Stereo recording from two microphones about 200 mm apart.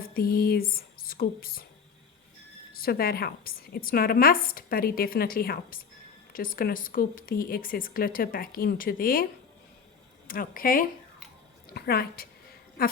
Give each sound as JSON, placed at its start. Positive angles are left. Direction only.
{"t": 0.0, "sound": "speech", "side_deg": 45}
{"t": 2.8, "sound": "a woman's voice", "side_deg": 50}
{"t": 10.2, "sound": "a woman's voice", "side_deg": 45}